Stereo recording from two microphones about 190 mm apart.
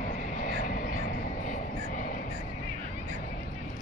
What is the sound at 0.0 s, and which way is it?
Vehicle, 40° left (ahead or behind).